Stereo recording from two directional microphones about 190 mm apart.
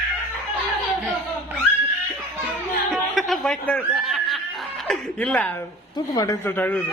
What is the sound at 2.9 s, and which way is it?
Snicker, centre (ahead or behind).